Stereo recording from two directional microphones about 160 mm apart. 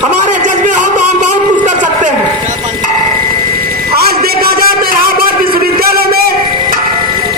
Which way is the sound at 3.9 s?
75° right (ahead or behind).